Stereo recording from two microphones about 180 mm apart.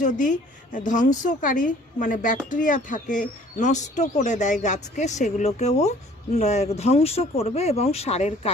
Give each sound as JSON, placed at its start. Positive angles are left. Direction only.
{"t": 0.0, "sound": "a woman's voice", "side_deg": 45}